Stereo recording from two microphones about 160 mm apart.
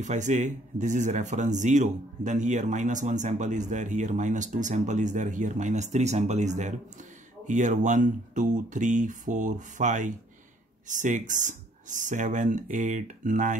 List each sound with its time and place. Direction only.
0.0 s speech: 50° right (ahead or behind)